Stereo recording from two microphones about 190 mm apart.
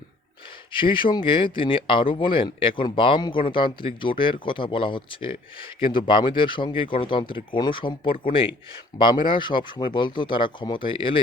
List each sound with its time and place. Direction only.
0.7 s speech: 25° left (ahead or behind)
9.3 s speech: 25° left (ahead or behind)